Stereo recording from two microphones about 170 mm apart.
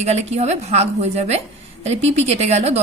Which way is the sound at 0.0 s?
40° right (ahead or behind).